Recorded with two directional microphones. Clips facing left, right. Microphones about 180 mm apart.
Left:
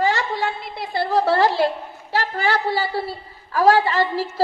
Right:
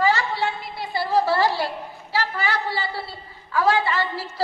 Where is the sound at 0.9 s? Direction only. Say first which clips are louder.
Left 2 dB; 50° left (ahead or behind).